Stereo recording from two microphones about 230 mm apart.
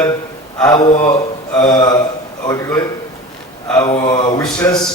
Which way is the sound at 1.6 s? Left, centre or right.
Centre.